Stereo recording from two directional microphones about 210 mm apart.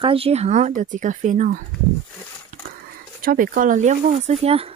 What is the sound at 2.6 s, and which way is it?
Speech, 45° right (ahead or behind).